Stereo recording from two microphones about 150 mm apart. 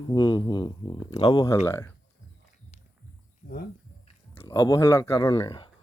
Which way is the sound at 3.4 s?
55° left (ahead or behind).